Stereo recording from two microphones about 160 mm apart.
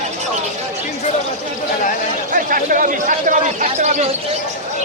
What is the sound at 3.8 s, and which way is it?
Speech, 45° right (ahead or behind).